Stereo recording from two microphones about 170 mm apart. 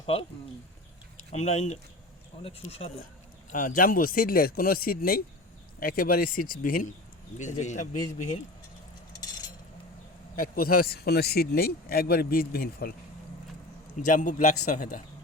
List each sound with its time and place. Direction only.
0.0 s speech: 35° left (ahead or behind)
1.3 s speech: 40° left (ahead or behind)
3.5 s a man's voice: 55° left (ahead or behind)
10.3 s speech: 55° left (ahead or behind)
14.0 s a man's voice: 50° left (ahead or behind)